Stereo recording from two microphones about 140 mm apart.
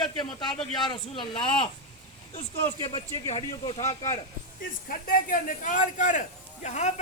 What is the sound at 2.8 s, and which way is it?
Speech, 35° left (ahead or behind).